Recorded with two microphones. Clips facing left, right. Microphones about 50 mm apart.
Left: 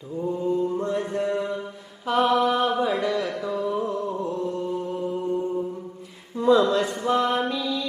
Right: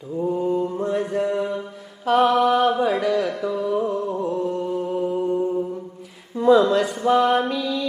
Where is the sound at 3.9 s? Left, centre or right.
Right.